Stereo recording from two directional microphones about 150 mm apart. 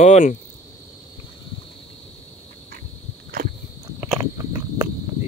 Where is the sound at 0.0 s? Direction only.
55° left (ahead or behind).